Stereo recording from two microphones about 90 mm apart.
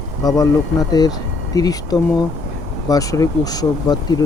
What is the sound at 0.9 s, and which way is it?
Speech, 45° left (ahead or behind).